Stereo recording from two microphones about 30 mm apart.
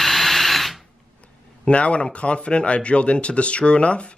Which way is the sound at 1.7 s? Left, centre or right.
Left.